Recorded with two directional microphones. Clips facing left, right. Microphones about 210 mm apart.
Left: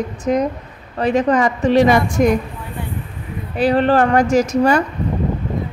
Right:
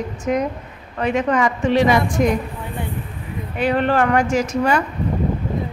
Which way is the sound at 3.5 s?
35° left (ahead or behind).